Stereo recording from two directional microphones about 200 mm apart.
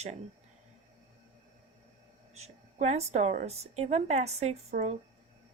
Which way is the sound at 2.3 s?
35° right (ahead or behind).